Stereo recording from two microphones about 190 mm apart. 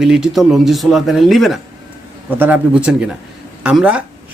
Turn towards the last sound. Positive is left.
turn(degrees=-5)  # may be behind; listen again after turning